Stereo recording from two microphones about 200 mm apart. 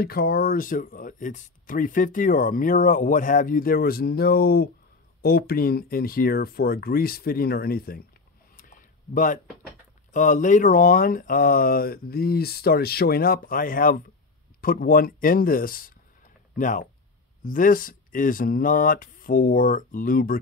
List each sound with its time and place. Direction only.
0.0 s speech: 50° left (ahead or behind)
8.5 s a sound: 40° left (ahead or behind)
10.1 s speech: 40° left (ahead or behind)